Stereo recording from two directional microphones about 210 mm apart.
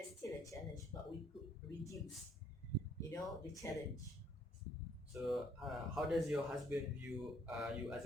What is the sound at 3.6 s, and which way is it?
Speech, 15° left (ahead or behind).